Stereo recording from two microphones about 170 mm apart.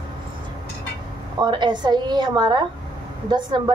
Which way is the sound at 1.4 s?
25° right (ahead or behind).